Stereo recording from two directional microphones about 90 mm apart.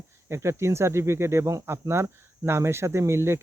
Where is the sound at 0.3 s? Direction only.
30° right (ahead or behind).